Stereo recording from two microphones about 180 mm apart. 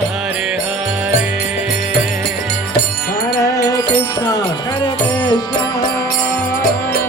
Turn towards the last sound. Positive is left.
turn(degrees=25)  # may be behind; listen again after turning